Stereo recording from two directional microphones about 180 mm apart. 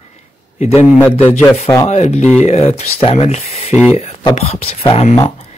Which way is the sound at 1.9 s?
40° left (ahead or behind).